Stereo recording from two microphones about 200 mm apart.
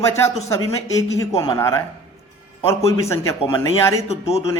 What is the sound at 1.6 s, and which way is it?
Speech, 15° left (ahead or behind).